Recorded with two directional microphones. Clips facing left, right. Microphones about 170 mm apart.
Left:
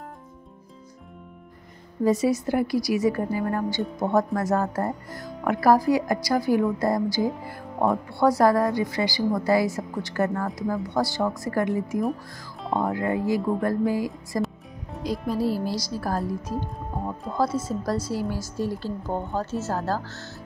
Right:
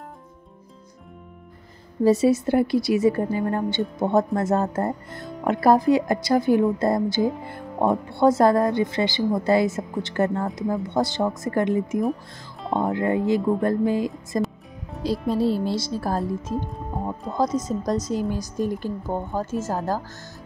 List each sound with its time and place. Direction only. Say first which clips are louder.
2.0 s a woman's voice: right 4 dB; 25° right (ahead or behind)
14.4 s music: right 2 dB; centre (ahead or behind)
15.0 s a woman's voice: right 3 dB; 25° right (ahead or behind)
17.4 s a woman's voice: right 2 dB; 20° right (ahead or behind)